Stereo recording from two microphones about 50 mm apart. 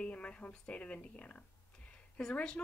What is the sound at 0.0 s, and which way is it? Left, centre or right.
Speech, left.